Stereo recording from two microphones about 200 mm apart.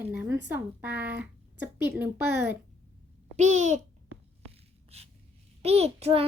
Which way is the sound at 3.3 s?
35° right (ahead or behind).